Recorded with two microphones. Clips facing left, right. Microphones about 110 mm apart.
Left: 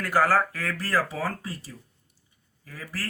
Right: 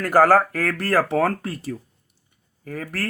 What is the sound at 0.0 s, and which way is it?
Speech, 50° right (ahead or behind).